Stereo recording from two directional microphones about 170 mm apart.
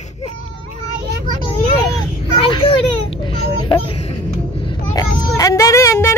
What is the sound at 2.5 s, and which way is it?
Speech, 30° left (ahead or behind).